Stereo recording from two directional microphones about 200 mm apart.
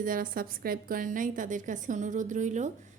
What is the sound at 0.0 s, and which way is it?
A woman's voice, 45° right (ahead or behind).